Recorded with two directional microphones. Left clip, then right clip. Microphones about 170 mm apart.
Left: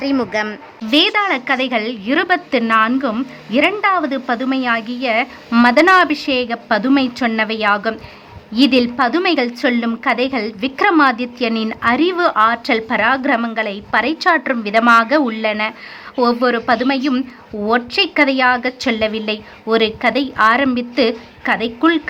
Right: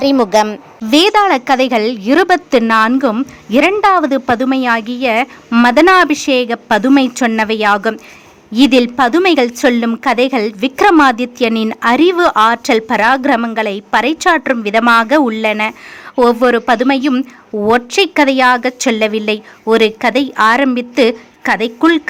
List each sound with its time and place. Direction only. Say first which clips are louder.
0.9 s speech: right 5 dB; 35° right (ahead or behind)